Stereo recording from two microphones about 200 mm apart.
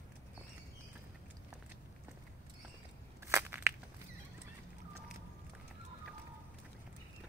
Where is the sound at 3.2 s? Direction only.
10° right (ahead or behind).